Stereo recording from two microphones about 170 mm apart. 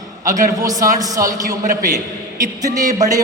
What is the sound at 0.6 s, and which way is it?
Speech, 20° right (ahead or behind).